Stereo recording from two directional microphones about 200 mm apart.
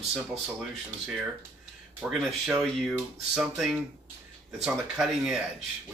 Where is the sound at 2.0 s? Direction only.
Centre (ahead or behind).